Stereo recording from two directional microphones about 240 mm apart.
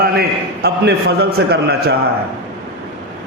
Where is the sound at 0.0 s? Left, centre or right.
Right.